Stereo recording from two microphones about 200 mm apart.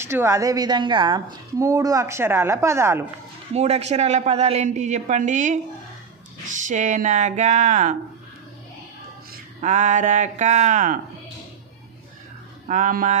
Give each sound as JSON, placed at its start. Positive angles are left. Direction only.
{"t": 0.0, "sound": "a woman's voice", "side_deg": -10}
{"t": 3.5, "sound": "speech", "side_deg": -30}
{"t": 6.7, "sound": "speech", "side_deg": -35}
{"t": 9.3, "sound": "speech", "side_deg": -40}
{"t": 12.6, "sound": "speech", "side_deg": -40}